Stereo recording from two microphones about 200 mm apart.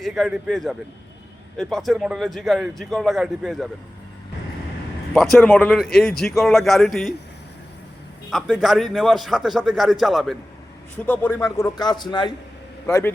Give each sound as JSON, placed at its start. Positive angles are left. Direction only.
{"t": 0.0, "sound": "speech", "side_deg": 0}
{"t": 5.1, "sound": "speech", "side_deg": 0}
{"t": 8.3, "sound": "speech", "side_deg": 0}